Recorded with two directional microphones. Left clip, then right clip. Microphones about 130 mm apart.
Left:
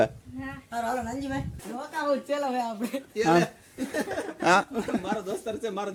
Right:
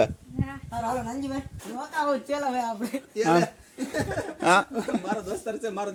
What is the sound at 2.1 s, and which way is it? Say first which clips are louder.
Speech: left 3 dB; 20° left (ahead or behind).